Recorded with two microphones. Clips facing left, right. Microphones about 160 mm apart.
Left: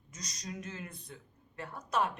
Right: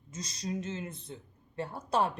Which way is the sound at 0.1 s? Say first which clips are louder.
Right 7 dB; 30° right (ahead or behind).